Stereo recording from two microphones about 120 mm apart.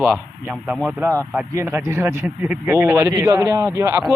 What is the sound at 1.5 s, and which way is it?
A man's voice, 25° right (ahead or behind).